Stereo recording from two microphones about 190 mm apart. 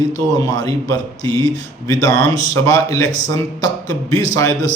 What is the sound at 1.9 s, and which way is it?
Speech, 20° left (ahead or behind).